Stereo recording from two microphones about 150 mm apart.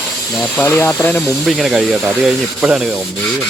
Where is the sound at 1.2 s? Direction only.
Centre (ahead or behind).